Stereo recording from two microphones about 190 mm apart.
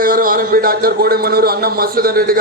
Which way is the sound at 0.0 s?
50° right (ahead or behind).